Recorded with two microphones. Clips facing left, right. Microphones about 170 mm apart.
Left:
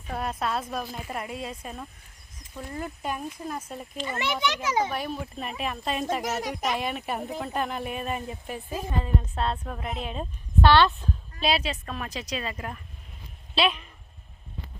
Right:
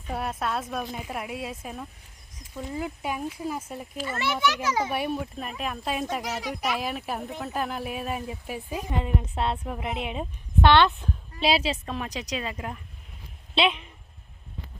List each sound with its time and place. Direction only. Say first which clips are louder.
0.1 s a woman's voice: even; 5° right (ahead or behind)
4.0 s a child's voice: right 2 dB; 20° left (ahead or behind)
4.9 s speech: right 3 dB; 10° right (ahead or behind)
6.2 s speech: left 3 dB; 45° left (ahead or behind)
6.5 s a woman's voice: even; centre (ahead or behind); by 13.9 s 20° right (ahead or behind)